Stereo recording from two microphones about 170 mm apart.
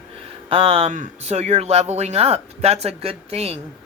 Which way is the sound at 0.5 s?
35° right (ahead or behind).